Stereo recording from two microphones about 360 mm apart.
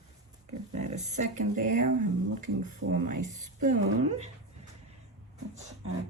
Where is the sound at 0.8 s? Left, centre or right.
Centre.